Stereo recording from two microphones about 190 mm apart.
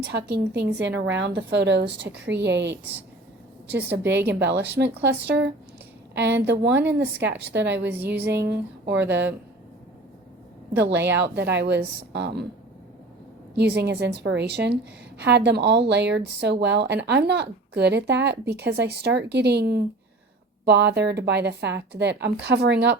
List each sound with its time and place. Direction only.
0.1 s a woman's voice: 60° right (ahead or behind)
3.8 s a woman's voice: 60° right (ahead or behind)
7.9 s a woman's voice: 10° right (ahead or behind)
8.2 s a woman's voice: 60° right (ahead or behind)
10.9 s a woman's voice: 10° right (ahead or behind)
11.2 s a woman's voice: 65° right (ahead or behind)
13.6 s a woman's voice: 65° right (ahead or behind)